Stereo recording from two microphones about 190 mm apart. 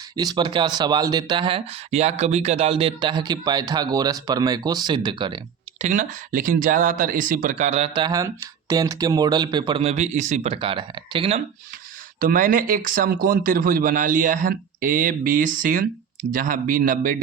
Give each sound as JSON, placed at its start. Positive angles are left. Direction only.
{"t": 0.2, "sound": "speech", "side_deg": -20}
{"t": 5.8, "sound": "speech", "side_deg": -40}
{"t": 12.2, "sound": "speech", "side_deg": -45}